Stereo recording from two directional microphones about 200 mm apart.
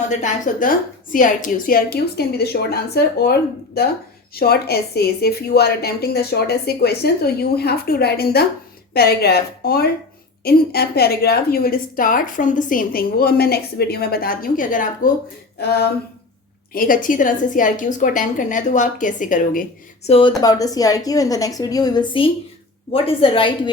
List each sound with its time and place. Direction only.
0.2 s a woman's voice: 40° left (ahead or behind)
4.4 s a woman's voice: 50° left (ahead or behind)
15.6 s a woman's voice: 55° left (ahead or behind)
20.1 s a woman's voice: 30° left (ahead or behind)
20.4 s a woman's voice: 20° left (ahead or behind)